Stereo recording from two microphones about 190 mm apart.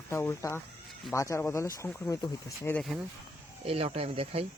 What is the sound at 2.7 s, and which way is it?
Speech, centre (ahead or behind).